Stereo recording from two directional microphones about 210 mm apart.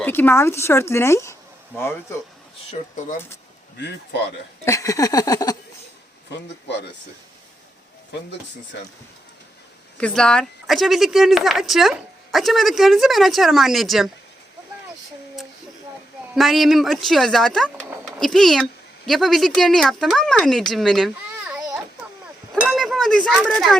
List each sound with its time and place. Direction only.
0.0 s speech: 10° left (ahead or behind)
4.6 s a sound: 15° left (ahead or behind)
6.3 s speech: 55° left (ahead or behind)
10.0 s speech: 5° left (ahead or behind)
16.3 s speech: centre (ahead or behind)
22.6 s a sound: centre (ahead or behind)